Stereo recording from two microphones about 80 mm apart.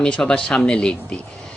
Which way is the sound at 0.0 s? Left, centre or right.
Centre.